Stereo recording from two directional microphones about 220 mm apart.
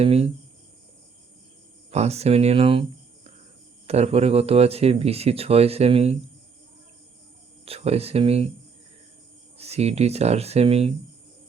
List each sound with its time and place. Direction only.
0.0 s speech: 25° right (ahead or behind)
1.9 s speech: 30° right (ahead or behind)
3.8 s speech: 30° right (ahead or behind)
7.6 s speech: 25° right (ahead or behind)
9.6 s speech: 30° right (ahead or behind)